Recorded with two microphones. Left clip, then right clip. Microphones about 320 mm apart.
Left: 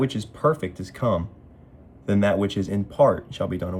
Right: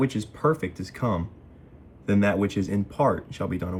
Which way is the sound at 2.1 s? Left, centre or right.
Centre.